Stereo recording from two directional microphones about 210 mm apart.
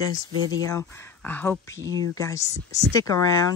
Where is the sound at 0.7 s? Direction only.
10° left (ahead or behind).